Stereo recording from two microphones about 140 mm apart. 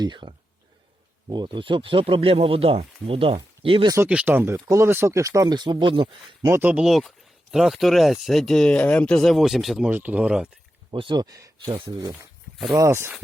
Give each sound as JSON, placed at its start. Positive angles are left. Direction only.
{"t": 0.0, "sound": "speech", "side_deg": -35}
{"t": 4.1, "sound": "speech", "side_deg": -10}
{"t": 6.5, "sound": "speech", "side_deg": -10}
{"t": 9.9, "sound": "speech", "side_deg": -10}
{"t": 10.9, "sound": "speech", "side_deg": -35}